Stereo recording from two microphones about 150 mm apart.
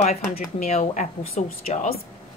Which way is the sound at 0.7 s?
45° left (ahead or behind).